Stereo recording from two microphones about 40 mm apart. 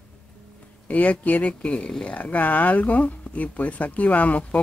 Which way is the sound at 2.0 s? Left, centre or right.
Left.